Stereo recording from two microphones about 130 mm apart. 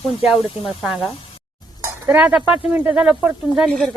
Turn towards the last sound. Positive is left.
turn(degrees=0)  # may be behind; listen again after turning